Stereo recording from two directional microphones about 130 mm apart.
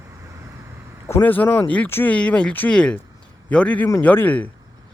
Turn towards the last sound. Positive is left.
turn(degrees=15)  # may be behind; listen again after turning